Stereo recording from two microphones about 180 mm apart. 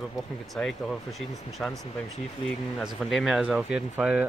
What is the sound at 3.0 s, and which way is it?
Speech, centre (ahead or behind).